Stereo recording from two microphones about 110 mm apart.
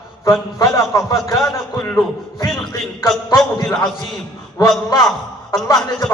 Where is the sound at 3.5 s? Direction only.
30° left (ahead or behind).